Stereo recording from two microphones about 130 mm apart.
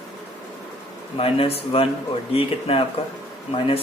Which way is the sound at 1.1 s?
45° left (ahead or behind).